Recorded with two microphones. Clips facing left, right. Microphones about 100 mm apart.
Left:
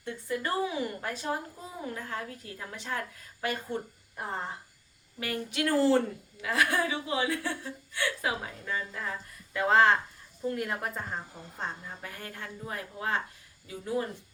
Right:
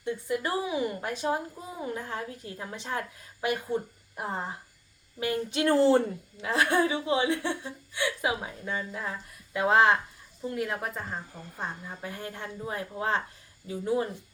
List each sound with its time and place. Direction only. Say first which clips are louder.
0.0 s a woman's voice: right 3 dB; 15° right (ahead or behind)
10.4 s a woman's voice: right 1 dB; centre (ahead or behind)
11.3 s speech: right 2 dB; 15° left (ahead or behind)
11.5 s speech: right 1 dB; 10° right (ahead or behind)
12.0 s a woman's voice: right 5 dB; 20° right (ahead or behind)